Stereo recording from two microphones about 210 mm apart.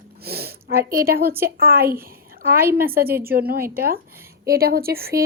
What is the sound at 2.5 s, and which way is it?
Speech, 10° right (ahead or behind).